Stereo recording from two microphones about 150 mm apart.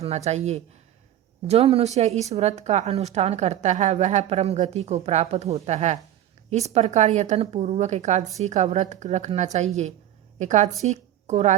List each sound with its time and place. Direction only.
0.0 s a woman's voice: 45° right (ahead or behind)